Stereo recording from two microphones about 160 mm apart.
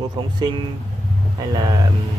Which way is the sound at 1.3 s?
25° right (ahead or behind).